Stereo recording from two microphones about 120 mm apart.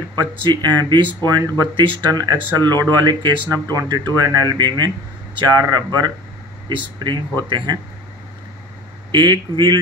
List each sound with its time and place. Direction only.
0.1 s speech: 40° right (ahead or behind)
9.1 s speech: 40° right (ahead or behind)